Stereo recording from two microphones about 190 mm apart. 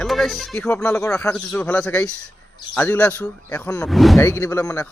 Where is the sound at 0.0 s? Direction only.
Centre (ahead or behind).